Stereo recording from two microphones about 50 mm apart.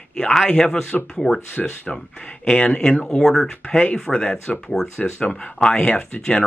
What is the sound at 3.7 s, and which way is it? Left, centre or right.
Speech, left.